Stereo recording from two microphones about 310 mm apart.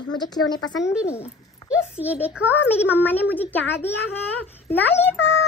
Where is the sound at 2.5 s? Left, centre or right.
Centre.